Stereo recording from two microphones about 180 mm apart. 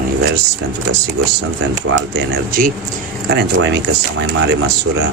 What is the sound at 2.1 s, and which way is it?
Speech, 55° right (ahead or behind).